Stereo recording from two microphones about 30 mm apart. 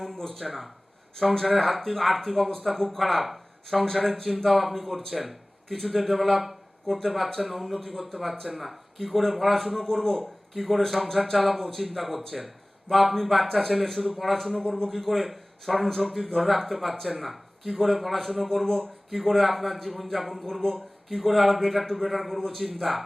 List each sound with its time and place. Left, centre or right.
0.2 s speech: centre
0.4 s speech: centre
3.0 s speech: centre
5.6 s a man's voice: centre
5.9 s speech: centre
10.2 s speech: centre
18.4 s speech: centre
20.5 s speech: centre
21.1 s speech: centre